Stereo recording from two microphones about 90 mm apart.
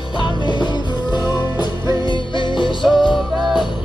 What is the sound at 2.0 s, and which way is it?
Music, 65° left (ahead or behind).